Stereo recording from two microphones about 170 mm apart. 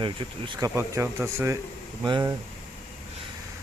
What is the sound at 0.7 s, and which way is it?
Speech, 15° right (ahead or behind).